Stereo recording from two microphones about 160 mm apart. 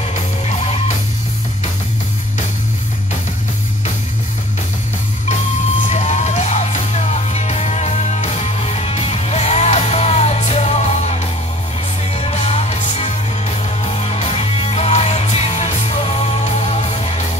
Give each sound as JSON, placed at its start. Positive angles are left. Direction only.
{"t": 0.1, "sound": "music", "side_deg": 45}
{"t": 5.9, "sound": "music", "side_deg": 45}